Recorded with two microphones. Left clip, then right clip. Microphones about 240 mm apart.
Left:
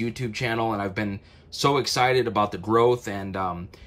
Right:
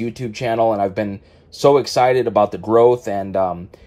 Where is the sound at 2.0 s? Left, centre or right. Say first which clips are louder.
Right 7 dB; centre.